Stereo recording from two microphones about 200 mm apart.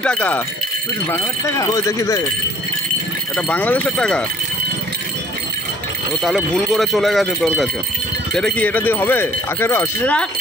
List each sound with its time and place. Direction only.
0.0 s speech: 5° left (ahead or behind)
3.3 s speech: 5° left (ahead or behind)
6.2 s speech: centre (ahead or behind)